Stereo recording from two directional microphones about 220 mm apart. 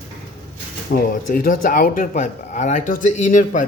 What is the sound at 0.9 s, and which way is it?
Speech, 40° left (ahead or behind).